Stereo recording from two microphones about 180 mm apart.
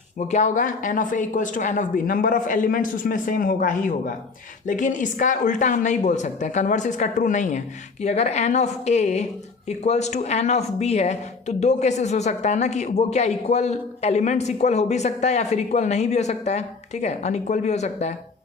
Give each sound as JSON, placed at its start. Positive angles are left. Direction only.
{"t": 0.2, "sound": "speech", "side_deg": 40}